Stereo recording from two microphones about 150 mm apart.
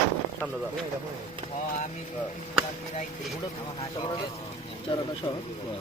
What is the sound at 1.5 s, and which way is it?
Speech, 55° left (ahead or behind).